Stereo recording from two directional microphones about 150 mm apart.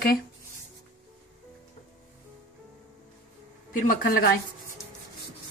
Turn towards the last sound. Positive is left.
turn(degrees=85)